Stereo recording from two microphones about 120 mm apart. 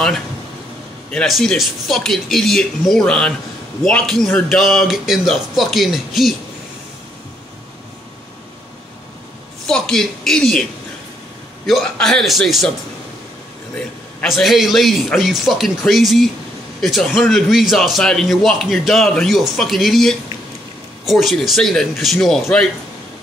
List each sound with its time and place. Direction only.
1.1 s a man's voice: 5° left (ahead or behind)
9.7 s a man's voice: 5° left (ahead or behind)
14.2 s a man's voice: centre (ahead or behind)